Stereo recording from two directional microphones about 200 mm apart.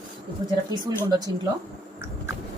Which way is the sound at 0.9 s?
20° right (ahead or behind).